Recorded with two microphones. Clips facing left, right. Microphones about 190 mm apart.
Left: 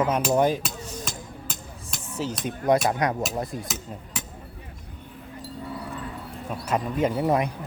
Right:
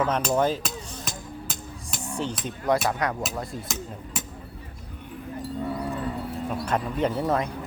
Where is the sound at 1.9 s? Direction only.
Centre (ahead or behind).